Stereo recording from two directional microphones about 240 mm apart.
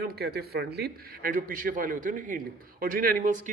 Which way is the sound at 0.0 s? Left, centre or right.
Right.